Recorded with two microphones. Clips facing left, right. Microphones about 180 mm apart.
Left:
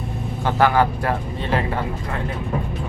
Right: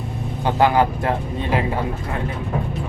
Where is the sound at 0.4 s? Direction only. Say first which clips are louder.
Right 1 dB; 20° right (ahead or behind).